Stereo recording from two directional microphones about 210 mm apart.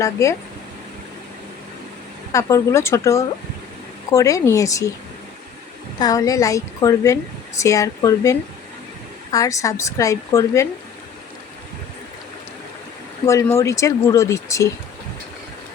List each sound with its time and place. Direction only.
0.0 s speech: 15° left (ahead or behind)
2.3 s speech: 15° left (ahead or behind)
6.0 s speech: 15° left (ahead or behind)
13.2 s speech: 15° left (ahead or behind)